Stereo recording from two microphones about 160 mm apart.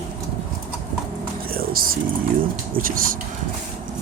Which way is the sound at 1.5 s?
65° right (ahead or behind).